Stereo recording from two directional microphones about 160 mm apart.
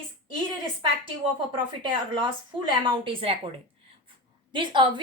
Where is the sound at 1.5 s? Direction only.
30° right (ahead or behind).